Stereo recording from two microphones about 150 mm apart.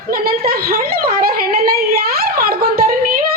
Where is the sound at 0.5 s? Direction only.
85° right.